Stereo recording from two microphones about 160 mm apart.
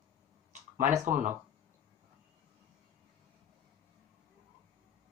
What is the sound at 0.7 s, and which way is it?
Speech, 55° right (ahead or behind).